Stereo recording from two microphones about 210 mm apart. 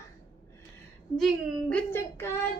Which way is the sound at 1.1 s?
Centre (ahead or behind).